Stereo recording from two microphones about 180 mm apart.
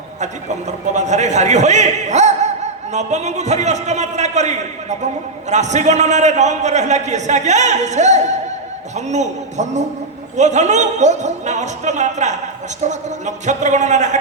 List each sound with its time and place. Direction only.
0.9 s a man's voice: 40° right (ahead or behind)